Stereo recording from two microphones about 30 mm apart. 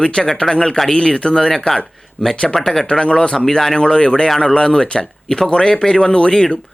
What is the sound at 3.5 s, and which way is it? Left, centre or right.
Speech, centre.